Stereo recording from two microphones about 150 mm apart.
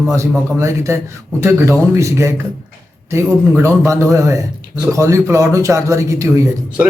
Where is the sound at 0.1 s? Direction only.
20° right (ahead or behind).